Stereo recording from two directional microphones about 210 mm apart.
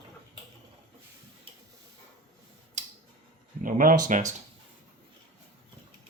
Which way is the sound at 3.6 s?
40° right (ahead or behind).